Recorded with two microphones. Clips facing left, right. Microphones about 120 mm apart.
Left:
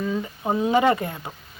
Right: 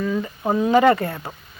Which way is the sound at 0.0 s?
25° left (ahead or behind).